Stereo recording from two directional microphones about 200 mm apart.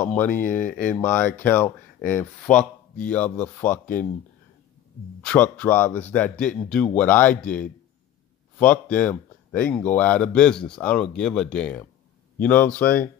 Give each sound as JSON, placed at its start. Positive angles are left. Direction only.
{"t": 0.0, "sound": "speech", "side_deg": 10}
{"t": 0.3, "sound": "speech", "side_deg": 40}
{"t": 0.8, "sound": "speech", "side_deg": 5}
{"t": 5.2, "sound": "speech", "side_deg": 5}